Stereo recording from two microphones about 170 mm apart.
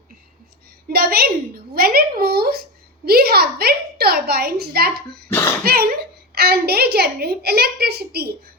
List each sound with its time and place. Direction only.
0.9 s a woman's voice: 65° right (ahead or behind)
5.3 s a sound: 15° left (ahead or behind)
5.6 s a woman's voice: 65° right (ahead or behind)